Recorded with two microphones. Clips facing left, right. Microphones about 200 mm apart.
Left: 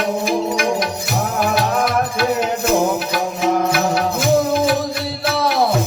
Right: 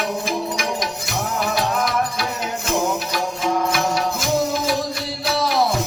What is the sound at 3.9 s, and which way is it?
Music, 60° left (ahead or behind).